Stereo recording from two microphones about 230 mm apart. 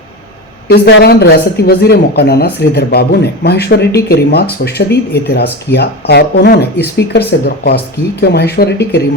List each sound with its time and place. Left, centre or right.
0.7 s speech: left